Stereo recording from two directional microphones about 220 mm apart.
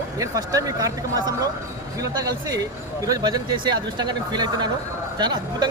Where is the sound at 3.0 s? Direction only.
15° right (ahead or behind).